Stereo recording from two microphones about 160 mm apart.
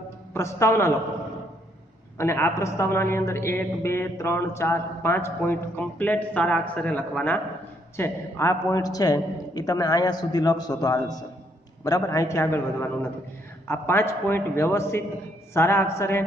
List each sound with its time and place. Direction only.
0.3 s a man's voice: 15° left (ahead or behind)
2.1 s a man's voice: 15° left (ahead or behind)